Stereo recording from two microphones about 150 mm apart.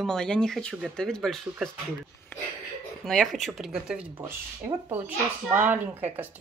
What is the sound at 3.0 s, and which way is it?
Speech, centre (ahead or behind).